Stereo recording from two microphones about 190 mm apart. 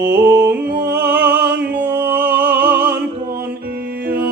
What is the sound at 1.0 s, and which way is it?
Music, 10° right (ahead or behind).